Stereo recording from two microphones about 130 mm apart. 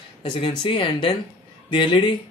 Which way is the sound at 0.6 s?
45° left (ahead or behind).